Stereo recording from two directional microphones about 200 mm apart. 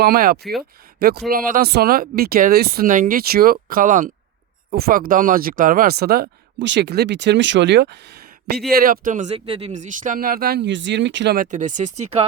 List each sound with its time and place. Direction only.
0.0 s speech: 50° right (ahead or behind)
11.3 s speech: 40° right (ahead or behind)